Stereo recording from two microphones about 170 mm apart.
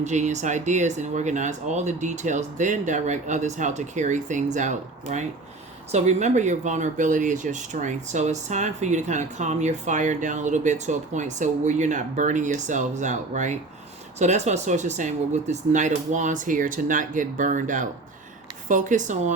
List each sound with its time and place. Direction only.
0.0 s speech: 45° right (ahead or behind)